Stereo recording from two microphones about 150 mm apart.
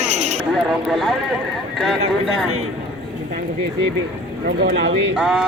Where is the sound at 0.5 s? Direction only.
Centre (ahead or behind).